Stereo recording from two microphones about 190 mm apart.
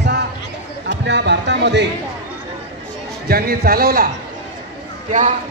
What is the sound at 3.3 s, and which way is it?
Speech, 55° right (ahead or behind).